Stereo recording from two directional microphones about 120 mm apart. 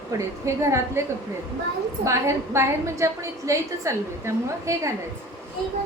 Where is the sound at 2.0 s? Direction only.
20° right (ahead or behind).